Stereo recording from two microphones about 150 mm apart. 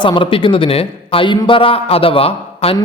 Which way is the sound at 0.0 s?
35° left (ahead or behind).